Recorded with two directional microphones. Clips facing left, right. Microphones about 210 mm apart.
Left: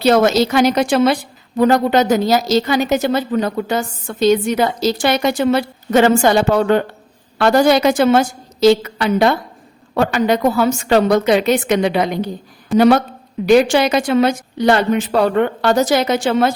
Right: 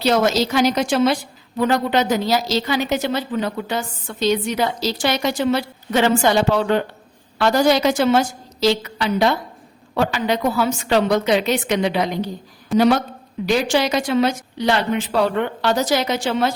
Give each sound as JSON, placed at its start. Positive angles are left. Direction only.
{"t": 0.0, "sound": "a woman's voice", "side_deg": 55}
{"t": 12.7, "sound": "speech", "side_deg": 0}
{"t": 13.4, "sound": "a woman's voice", "side_deg": 60}